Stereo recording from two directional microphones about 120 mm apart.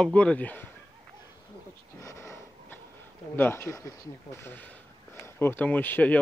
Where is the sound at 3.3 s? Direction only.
20° left (ahead or behind).